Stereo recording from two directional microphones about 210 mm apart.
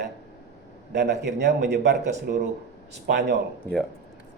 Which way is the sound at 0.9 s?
55° right (ahead or behind).